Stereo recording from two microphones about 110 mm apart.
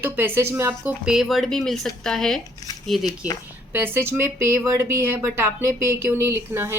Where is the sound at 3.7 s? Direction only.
20° right (ahead or behind).